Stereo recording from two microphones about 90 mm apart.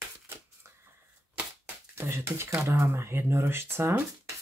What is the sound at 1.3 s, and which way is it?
Speech, 25° right (ahead or behind).